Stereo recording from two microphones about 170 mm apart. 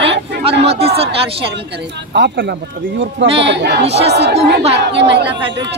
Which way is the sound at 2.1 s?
80° right.